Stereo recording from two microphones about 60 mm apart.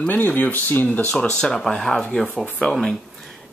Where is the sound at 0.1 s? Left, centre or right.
Left.